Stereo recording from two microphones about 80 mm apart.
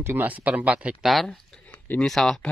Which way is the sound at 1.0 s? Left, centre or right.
Centre.